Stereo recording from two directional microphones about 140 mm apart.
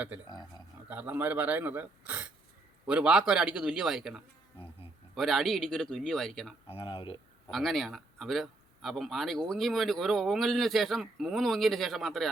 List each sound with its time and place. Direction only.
0.3 s speech: 30° left (ahead or behind)
0.9 s a man's voice: 10° right (ahead or behind)
6.7 s speech: 40° left (ahead or behind)
7.5 s a man's voice: centre (ahead or behind)